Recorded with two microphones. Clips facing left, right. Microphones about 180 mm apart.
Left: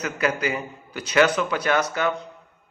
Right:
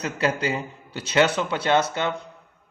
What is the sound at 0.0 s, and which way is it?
A man's voice, 30° right (ahead or behind).